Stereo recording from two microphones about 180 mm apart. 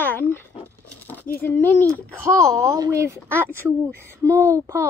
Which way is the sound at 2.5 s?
15° right (ahead or behind).